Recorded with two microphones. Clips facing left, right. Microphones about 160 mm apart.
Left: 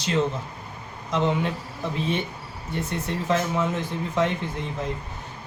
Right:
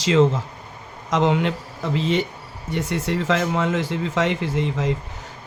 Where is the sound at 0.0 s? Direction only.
90° right.